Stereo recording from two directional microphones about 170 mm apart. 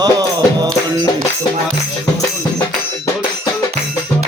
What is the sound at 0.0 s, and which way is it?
Music, 25° right (ahead or behind).